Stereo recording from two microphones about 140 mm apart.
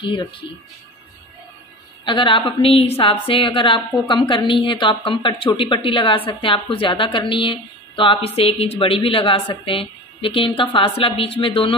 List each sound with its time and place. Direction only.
0.0 s a woman's voice: 35° left (ahead or behind)
2.0 s a woman's voice: 35° left (ahead or behind)